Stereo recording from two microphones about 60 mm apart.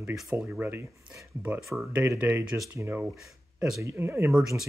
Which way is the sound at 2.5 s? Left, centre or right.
Right.